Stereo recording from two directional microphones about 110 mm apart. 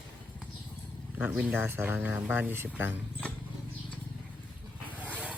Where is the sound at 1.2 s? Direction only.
10° right (ahead or behind).